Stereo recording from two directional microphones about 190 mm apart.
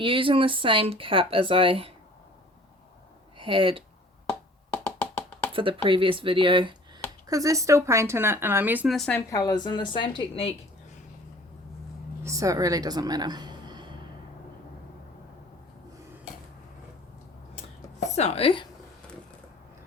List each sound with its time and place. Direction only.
0.0 s speech: 25° right (ahead or behind)
3.3 s speech: 25° right (ahead or behind)
4.9 s music: 10° left (ahead or behind)
5.5 s speech: 25° right (ahead or behind); by 9.2 s 5° left (ahead or behind)
9.3 s a woman's voice: 20° left (ahead or behind)
12.2 s speech: 15° right (ahead or behind)
18.1 s speech: 35° left (ahead or behind)